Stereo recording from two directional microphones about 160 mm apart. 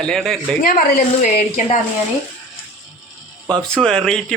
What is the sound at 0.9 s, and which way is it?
Speech, 50° left (ahead or behind).